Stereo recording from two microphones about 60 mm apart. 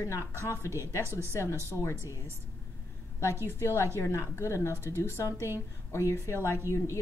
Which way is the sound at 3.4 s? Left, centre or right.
Left.